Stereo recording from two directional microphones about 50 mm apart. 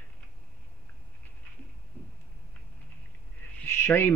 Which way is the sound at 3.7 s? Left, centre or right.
Left.